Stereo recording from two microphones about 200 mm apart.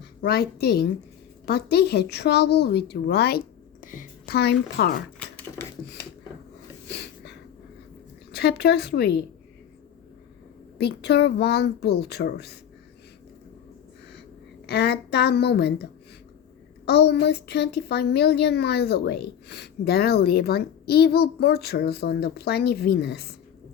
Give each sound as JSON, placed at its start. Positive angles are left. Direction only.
{"t": 0.2, "sound": "a woman's voice", "side_deg": 55}
{"t": 6.8, "sound": "a sound", "side_deg": 55}
{"t": 8.3, "sound": "a woman's voice", "side_deg": 55}
{"t": 10.8, "sound": "speech", "side_deg": 55}
{"t": 14.7, "sound": "a woman's voice", "side_deg": 55}